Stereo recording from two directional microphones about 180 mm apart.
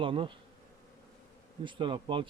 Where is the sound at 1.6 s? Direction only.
30° right (ahead or behind).